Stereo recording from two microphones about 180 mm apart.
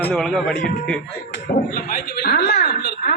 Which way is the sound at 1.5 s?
55° left (ahead or behind).